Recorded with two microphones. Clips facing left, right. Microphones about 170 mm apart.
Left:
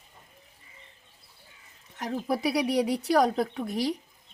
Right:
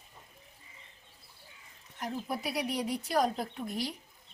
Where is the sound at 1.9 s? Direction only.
80° left.